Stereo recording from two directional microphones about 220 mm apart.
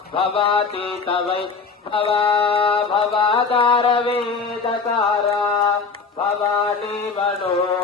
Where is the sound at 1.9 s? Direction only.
25° left (ahead or behind).